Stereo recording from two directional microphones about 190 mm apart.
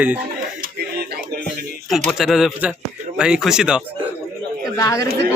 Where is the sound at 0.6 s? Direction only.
55° right (ahead or behind).